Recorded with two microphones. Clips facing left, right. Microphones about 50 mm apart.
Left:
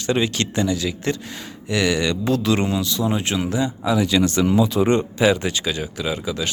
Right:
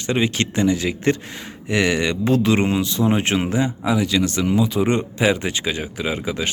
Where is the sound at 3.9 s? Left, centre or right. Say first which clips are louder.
Left 3 dB; centre.